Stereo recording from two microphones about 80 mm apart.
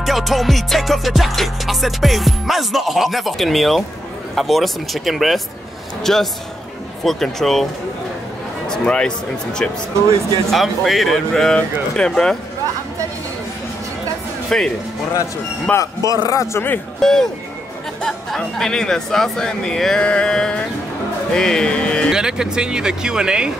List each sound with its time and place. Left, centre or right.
0.0 s music: centre
8.6 s speech: centre
10.5 s music: centre
14.5 s speech: centre
15.7 s speech: centre
16.3 s speech: left
17.0 s music: centre
18.0 s speech: centre
22.1 s speech: centre